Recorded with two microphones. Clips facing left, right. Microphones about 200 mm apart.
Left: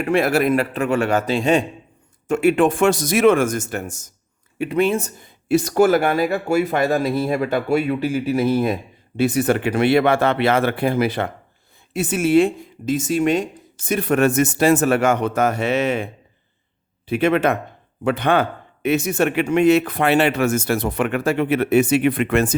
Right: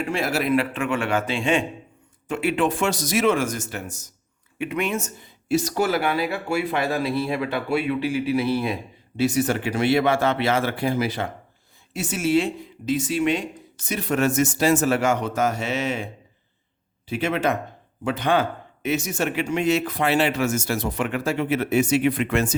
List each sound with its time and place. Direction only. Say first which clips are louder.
0.0 s speech: left 7 dB; 60° left (ahead or behind)
4.5 s speech: left 7 dB; 35° left (ahead or behind)
5.2 s speech: left 3 dB; 55° left (ahead or behind)
17.1 s speech: left 6 dB; 60° left (ahead or behind)